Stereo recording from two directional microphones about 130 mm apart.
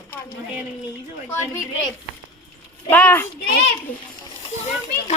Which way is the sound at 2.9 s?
15° left (ahead or behind).